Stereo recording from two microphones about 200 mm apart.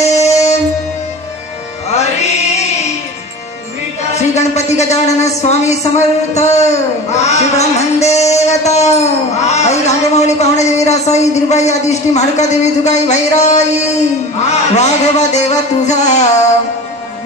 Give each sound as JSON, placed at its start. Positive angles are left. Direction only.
{"t": 0.0, "sound": "music", "side_deg": 35}
{"t": 2.0, "sound": "music", "side_deg": 35}
{"t": 4.1, "sound": "a woman's voice", "side_deg": 35}
{"t": 14.8, "sound": "a woman's voice", "side_deg": 35}